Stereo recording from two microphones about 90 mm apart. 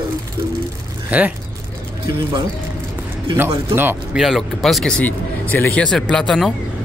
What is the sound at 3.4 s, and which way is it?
Speech, 25° right (ahead or behind).